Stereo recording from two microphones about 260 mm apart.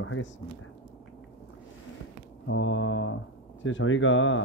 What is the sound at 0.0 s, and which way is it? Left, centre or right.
Speech, left.